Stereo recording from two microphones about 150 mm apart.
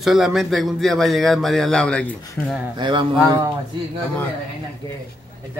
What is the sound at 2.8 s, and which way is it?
Speech, 30° right (ahead or behind).